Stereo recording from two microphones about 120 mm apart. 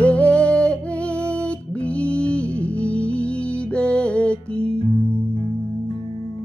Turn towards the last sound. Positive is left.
turn(degrees=10)  # may be behind; listen again after turning